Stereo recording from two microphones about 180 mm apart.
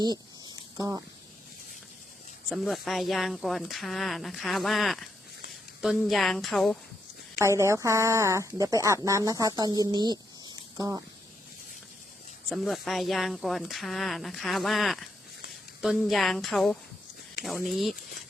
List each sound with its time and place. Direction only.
0.0 s a sound: 20° right (ahead or behind)
2.5 s speech: centre (ahead or behind)
7.3 s a woman's voice: 15° right (ahead or behind)
12.5 s speech: centre (ahead or behind)